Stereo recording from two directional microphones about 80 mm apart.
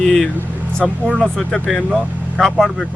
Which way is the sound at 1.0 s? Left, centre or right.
Centre.